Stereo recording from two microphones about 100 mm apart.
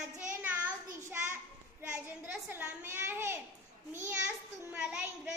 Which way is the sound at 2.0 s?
15° right (ahead or behind).